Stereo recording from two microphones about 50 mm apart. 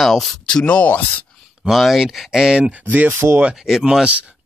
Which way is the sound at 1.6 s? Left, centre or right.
Centre.